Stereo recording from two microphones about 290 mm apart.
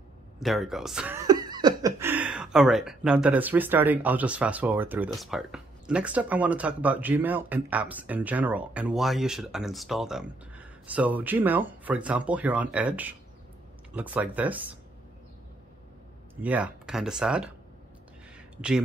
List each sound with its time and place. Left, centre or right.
0.4 s speech: centre
16.3 s speech: centre